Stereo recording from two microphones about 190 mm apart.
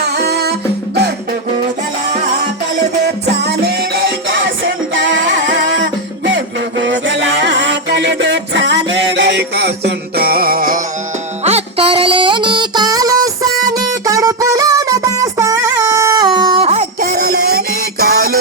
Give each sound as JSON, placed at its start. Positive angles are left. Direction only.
{"t": 0.0, "sound": "music", "side_deg": -60}
{"t": 3.4, "sound": "music", "side_deg": -60}
{"t": 4.6, "sound": "music", "side_deg": -85}
{"t": 11.4, "sound": "music", "side_deg": -35}
{"t": 17.0, "sound": "a sound", "side_deg": -55}